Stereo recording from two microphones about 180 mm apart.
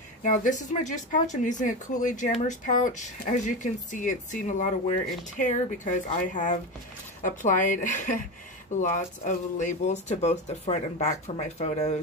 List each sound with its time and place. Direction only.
0.2 s speech: 45° left (ahead or behind)